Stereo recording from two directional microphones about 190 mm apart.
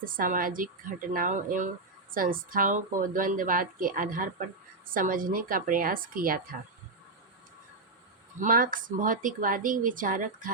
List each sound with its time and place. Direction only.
0.0 s speech: 50° right (ahead or behind)
8.4 s speech: 45° right (ahead or behind)